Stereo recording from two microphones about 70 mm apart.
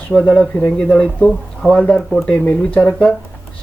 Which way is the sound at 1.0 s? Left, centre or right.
Centre.